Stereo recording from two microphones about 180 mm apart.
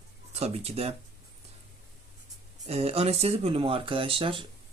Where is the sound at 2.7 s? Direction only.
35° right (ahead or behind).